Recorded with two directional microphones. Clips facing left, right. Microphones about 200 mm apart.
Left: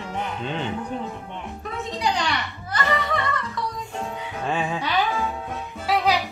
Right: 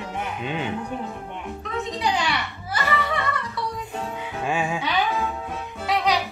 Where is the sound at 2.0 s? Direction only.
5° right (ahead or behind).